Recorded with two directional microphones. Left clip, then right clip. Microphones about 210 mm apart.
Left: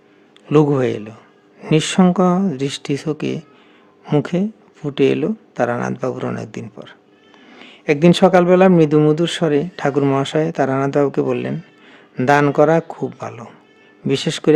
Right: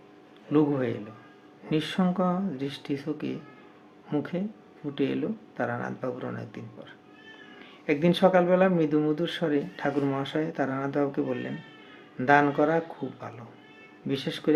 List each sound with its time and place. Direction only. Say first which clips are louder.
0.5 s speech: left 10 dB; 55° left (ahead or behind)